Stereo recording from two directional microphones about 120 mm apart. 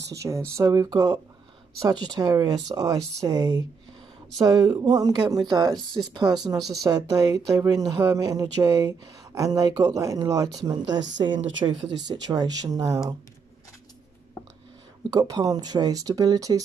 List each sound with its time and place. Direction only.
0.2 s speech: 25° right (ahead or behind)
15.0 s speech: 30° right (ahead or behind)